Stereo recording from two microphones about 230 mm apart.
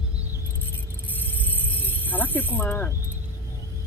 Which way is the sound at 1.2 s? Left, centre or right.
Centre.